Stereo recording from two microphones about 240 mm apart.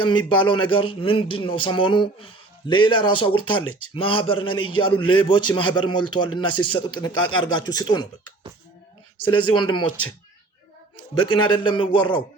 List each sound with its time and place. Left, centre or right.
0.0 s speech: centre
10.9 s speech: left